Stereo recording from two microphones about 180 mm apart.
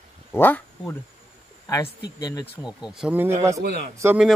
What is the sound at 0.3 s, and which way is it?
Speech, 10° left (ahead or behind).